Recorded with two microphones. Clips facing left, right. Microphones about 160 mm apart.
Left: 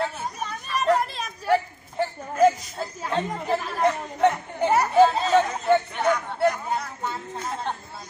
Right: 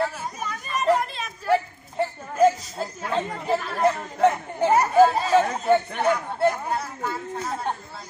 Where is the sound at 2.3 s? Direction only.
Centre (ahead or behind).